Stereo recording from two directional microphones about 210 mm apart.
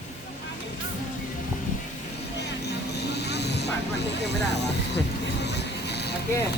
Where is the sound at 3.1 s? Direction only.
50° left (ahead or behind).